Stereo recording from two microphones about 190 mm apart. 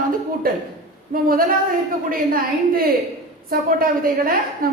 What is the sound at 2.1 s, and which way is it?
A woman's voice, 50° right (ahead or behind).